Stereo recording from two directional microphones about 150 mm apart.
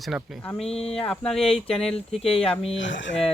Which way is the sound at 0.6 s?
40° left (ahead or behind).